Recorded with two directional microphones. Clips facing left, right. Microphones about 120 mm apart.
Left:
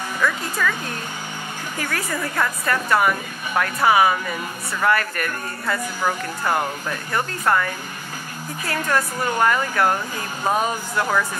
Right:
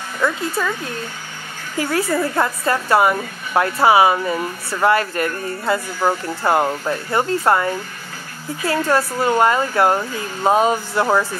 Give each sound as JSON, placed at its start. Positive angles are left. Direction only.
{"t": 0.2, "sound": "a woman's voice", "side_deg": -25}
{"t": 1.8, "sound": "a woman's voice", "side_deg": -25}